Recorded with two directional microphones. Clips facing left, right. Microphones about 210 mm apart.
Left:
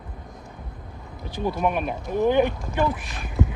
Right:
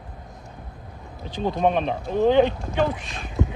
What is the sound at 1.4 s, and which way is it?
Speech, 25° right (ahead or behind).